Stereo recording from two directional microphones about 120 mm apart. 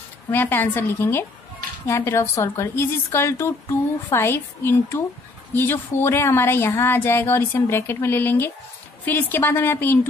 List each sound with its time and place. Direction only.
0.3 s speech: 15° left (ahead or behind)